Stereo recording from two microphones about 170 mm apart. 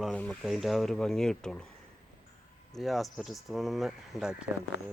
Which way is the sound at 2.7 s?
Centre (ahead or behind).